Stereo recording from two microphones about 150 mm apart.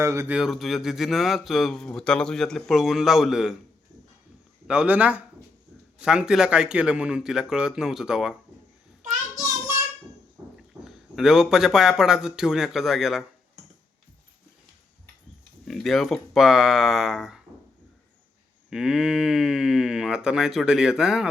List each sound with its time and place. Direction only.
0.0 s speech: 20° right (ahead or behind)
0.3 s speech: centre (ahead or behind)
4.7 s speech: 5° right (ahead or behind)
10.4 s a sound: 25° right (ahead or behind)
10.8 s speech: 5° right (ahead or behind)
15.6 s speech: centre (ahead or behind)
18.7 s speech: 5° right (ahead or behind)